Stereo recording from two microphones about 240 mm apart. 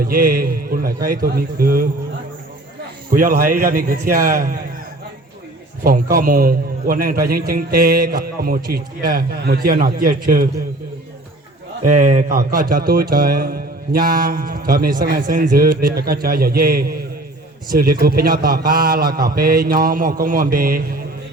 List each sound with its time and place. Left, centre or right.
0.0 s a man's voice: right
3.1 s a man's voice: right
5.8 s a man's voice: right
11.8 s a man's voice: right